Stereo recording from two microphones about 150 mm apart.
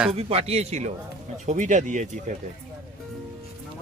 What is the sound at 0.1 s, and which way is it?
Speech, 45° right (ahead or behind).